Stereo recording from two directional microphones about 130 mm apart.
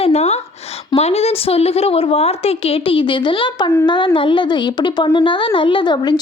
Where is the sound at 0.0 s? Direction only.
55° left (ahead or behind).